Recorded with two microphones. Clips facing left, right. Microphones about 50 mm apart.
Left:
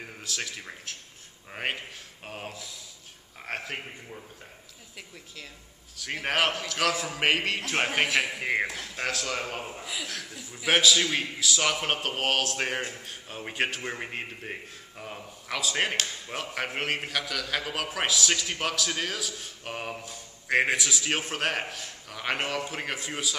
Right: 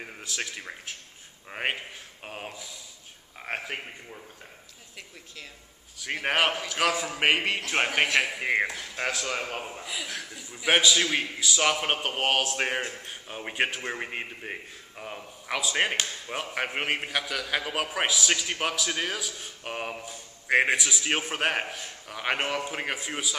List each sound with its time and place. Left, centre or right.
0.0 s a man's voice: centre
5.9 s a man's voice: centre